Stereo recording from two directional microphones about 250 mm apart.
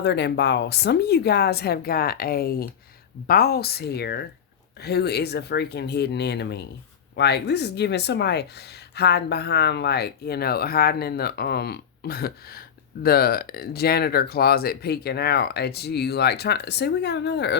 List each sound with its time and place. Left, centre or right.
0.0 s speech: left